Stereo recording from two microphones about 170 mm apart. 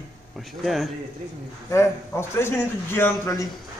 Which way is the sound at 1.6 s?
15° left (ahead or behind).